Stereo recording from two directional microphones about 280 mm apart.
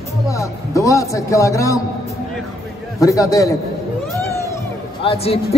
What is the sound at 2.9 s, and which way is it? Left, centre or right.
Speech, centre.